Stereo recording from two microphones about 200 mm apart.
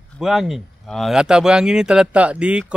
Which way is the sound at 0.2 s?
Centre (ahead or behind).